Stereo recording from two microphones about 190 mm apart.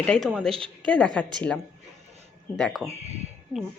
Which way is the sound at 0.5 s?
30° right (ahead or behind).